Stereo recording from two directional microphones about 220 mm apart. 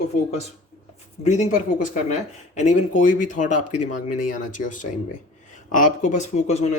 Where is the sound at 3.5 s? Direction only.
90° left.